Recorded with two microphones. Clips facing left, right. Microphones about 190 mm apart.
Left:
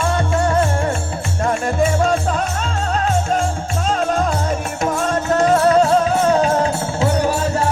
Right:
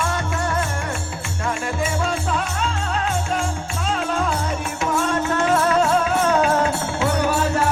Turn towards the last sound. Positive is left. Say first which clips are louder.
# left 2 dB
turn(degrees=35)  # may be behind; listen again after turning